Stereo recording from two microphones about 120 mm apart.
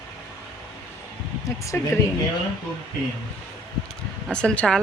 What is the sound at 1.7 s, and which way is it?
Speech, 15° left (ahead or behind).